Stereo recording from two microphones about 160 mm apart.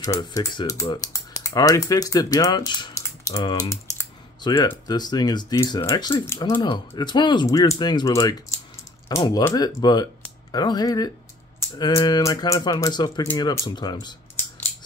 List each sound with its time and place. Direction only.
0.0 s speech: 20° left (ahead or behind)
6.6 s speech: 30° left (ahead or behind)